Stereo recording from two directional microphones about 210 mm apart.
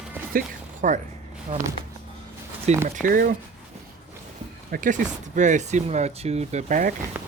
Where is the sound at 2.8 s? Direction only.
40° right (ahead or behind).